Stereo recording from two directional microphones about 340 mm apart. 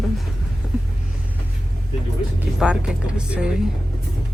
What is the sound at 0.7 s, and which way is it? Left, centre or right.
Vehicle, centre.